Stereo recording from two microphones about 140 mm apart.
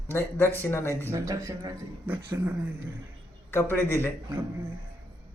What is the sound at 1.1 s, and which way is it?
Speech, 25° right (ahead or behind).